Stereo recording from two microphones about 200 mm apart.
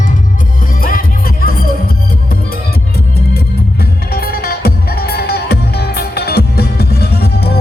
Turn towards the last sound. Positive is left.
turn(degrees=50)  # may be behind; listen again after turning